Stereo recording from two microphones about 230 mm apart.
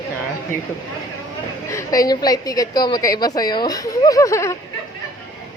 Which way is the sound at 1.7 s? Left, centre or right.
Centre.